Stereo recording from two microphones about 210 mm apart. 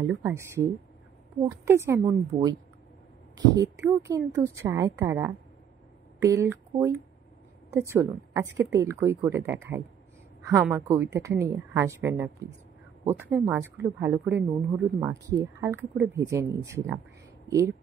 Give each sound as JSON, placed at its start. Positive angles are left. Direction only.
{"t": 0.0, "sound": "speech", "side_deg": -15}
{"t": 3.5, "sound": "a woman's voice", "side_deg": -15}